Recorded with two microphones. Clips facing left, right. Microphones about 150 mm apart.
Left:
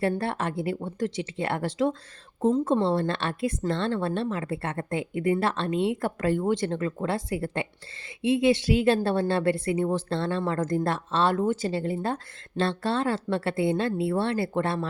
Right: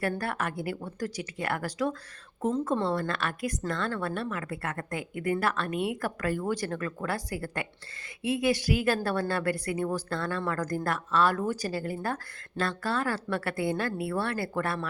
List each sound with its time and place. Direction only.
0.2 s speech: 25° left (ahead or behind)